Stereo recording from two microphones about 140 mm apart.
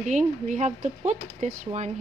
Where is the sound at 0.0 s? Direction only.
60° right (ahead or behind).